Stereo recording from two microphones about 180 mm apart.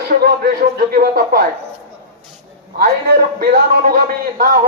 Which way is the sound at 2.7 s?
55° right (ahead or behind).